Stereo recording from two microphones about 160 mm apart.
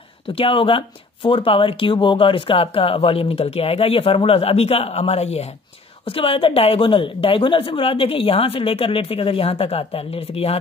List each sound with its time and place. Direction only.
0.3 s speech: 35° left (ahead or behind)